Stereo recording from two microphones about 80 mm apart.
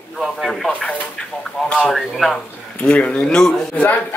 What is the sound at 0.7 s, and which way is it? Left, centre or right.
Speech, centre.